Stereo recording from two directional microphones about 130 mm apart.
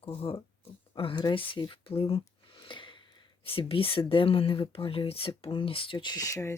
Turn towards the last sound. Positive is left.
turn(degrees=25)  # may be behind; listen again after turning